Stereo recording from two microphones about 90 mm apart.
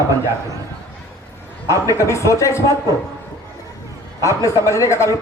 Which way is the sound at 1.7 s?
35° left (ahead or behind).